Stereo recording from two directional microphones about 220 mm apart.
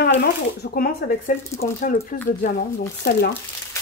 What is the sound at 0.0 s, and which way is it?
Speech, 45° left (ahead or behind).